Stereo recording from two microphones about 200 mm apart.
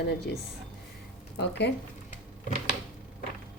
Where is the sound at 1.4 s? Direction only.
60° left (ahead or behind).